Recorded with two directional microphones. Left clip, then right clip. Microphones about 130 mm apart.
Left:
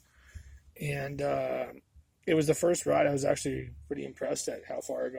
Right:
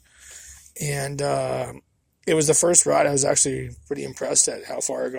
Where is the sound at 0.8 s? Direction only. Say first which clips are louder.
Right 7 dB; 25° right (ahead or behind).